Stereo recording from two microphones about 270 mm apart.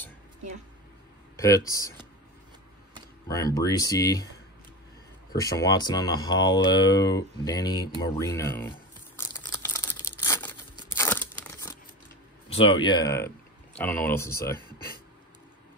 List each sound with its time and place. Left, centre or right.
1.3 s a sound: centre
1.7 s speech: centre
3.5 s speech: centre
5.3 s speech: centre
8.0 s crumpling: centre
12.5 s speech: centre